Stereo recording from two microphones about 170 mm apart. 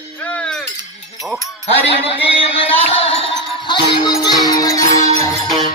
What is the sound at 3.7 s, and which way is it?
Music, 25° left (ahead or behind).